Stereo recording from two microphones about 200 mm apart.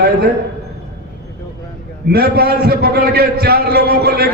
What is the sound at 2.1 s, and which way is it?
A man's voice, 50° right (ahead or behind).